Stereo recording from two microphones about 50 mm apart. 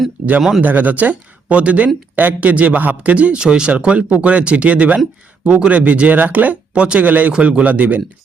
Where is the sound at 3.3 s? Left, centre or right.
Centre.